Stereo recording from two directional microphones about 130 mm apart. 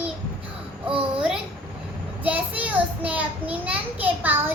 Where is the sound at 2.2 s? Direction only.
10° right (ahead or behind).